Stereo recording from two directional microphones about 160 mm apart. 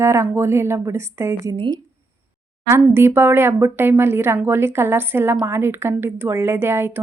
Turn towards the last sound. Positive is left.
turn(degrees=-15)  # may be behind; listen again after turning